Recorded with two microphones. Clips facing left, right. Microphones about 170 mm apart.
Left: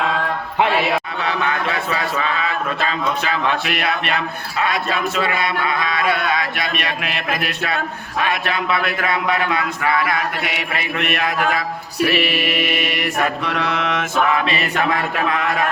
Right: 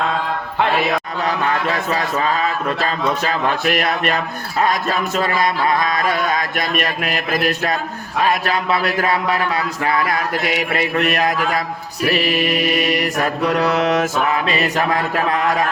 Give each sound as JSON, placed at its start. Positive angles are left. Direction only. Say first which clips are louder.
{"t": 1.2, "sound": "a man's voice", "louder": "right 2 dB", "side_deg": -40}
{"t": 8.3, "sound": "mantra", "louder": "right 2 dB", "side_deg": -40}